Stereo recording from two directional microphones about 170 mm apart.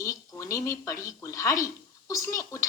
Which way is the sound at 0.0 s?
20° left (ahead or behind).